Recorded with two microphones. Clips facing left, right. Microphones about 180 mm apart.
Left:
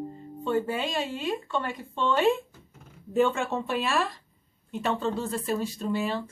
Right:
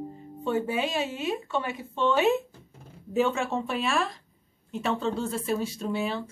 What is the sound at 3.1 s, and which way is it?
Speech, centre (ahead or behind).